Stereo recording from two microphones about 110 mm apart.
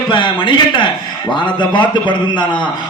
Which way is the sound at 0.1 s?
50° left (ahead or behind).